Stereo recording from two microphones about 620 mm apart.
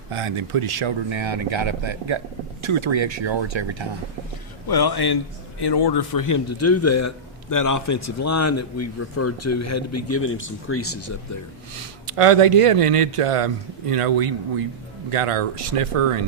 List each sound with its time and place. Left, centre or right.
0.1 s speech: right
4.7 s a man's voice: left
12.1 s a man's voice: right